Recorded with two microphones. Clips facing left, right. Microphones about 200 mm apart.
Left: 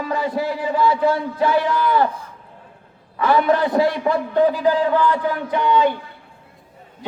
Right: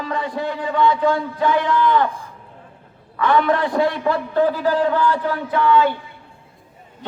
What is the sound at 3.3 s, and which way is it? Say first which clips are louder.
A man's voice: left 1 dB; 25° left (ahead or behind).